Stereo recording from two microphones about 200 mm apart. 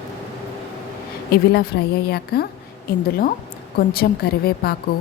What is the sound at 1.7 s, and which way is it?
Speech, 55° left (ahead or behind).